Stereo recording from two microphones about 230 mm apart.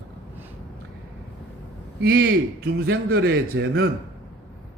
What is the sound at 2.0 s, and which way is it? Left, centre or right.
A man's voice, right.